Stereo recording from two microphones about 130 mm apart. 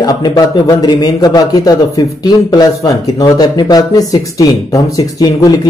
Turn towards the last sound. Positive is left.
turn(degrees=30)  # may be behind; listen again after turning